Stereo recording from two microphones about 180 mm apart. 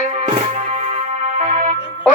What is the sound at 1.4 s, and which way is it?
Music, 40° right (ahead or behind).